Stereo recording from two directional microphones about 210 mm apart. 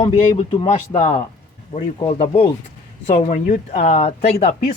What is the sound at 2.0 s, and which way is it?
Speech, 20° left (ahead or behind).